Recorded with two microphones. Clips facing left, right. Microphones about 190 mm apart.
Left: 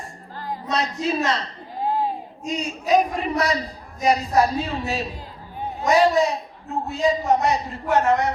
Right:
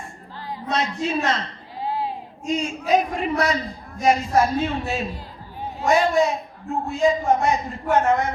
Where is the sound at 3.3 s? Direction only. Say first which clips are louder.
Even; 40° left (ahead or behind).